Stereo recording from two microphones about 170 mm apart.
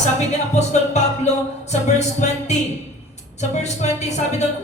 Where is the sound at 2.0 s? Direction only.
40° left (ahead or behind).